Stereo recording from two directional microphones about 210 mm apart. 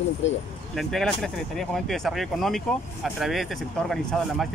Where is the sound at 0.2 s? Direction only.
60° left (ahead or behind).